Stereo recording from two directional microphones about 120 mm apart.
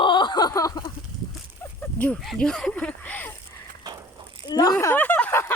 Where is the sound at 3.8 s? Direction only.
35° right (ahead or behind).